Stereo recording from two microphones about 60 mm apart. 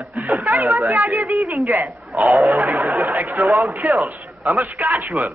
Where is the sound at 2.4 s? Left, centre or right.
Right.